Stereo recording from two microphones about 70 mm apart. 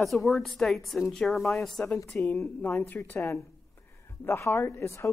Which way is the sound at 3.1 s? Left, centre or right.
Left.